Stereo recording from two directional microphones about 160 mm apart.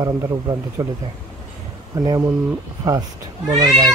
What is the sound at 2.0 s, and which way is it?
Speech, 20° right (ahead or behind).